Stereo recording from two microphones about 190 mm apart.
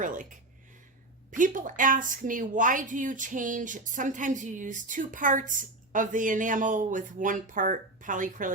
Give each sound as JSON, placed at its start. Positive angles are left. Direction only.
{"t": 0.0, "sound": "speech", "side_deg": -45}
{"t": 1.4, "sound": "speech", "side_deg": -45}